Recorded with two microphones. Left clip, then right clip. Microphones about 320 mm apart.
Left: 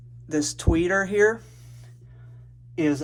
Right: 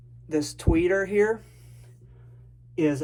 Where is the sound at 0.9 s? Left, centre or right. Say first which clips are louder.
Left 1 dB; left.